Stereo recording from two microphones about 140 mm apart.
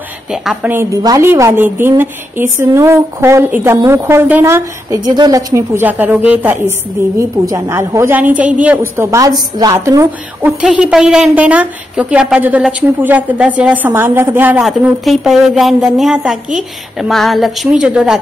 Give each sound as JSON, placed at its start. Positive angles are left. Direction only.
{"t": 0.3, "sound": "a woman's voice", "side_deg": -5}
{"t": 10.6, "sound": "a woman's voice", "side_deg": -5}
{"t": 14.6, "sound": "a woman's voice", "side_deg": 0}